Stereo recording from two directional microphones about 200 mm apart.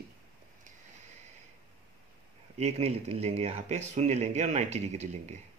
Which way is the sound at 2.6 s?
30° right (ahead or behind).